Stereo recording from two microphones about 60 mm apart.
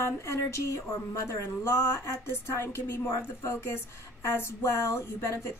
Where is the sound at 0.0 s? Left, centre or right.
Left.